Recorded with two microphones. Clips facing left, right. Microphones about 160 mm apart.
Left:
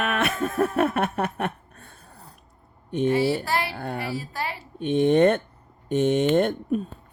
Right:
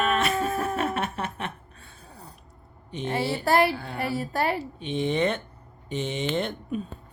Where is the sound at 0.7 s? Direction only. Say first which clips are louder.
Left 5 dB; 55° left (ahead or behind).